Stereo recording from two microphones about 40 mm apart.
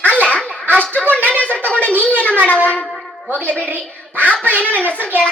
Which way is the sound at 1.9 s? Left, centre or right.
Left.